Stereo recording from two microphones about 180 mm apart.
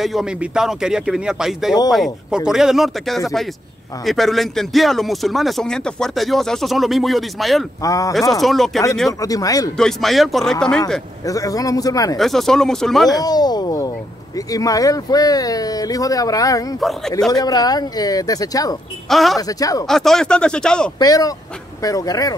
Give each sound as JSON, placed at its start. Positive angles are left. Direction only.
{"t": 0.0, "sound": "a man's voice", "side_deg": 0}
{"t": 7.8, "sound": "speech", "side_deg": 20}
{"t": 8.3, "sound": "a man's voice", "side_deg": 0}
{"t": 9.2, "sound": "speech", "side_deg": 20}
{"t": 9.8, "sound": "a man's voice", "side_deg": 0}
{"t": 11.2, "sound": "speech", "side_deg": 20}
{"t": 12.2, "sound": "a man's voice", "side_deg": 0}
{"t": 13.1, "sound": "speech", "side_deg": 20}
{"t": 19.0, "sound": "a man's voice", "side_deg": 0}
{"t": 19.4, "sound": "speech", "side_deg": 20}
{"t": 19.9, "sound": "a man's voice", "side_deg": 0}
{"t": 21.0, "sound": "speech", "side_deg": 20}